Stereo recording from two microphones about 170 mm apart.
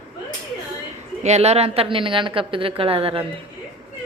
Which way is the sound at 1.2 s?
40° right (ahead or behind).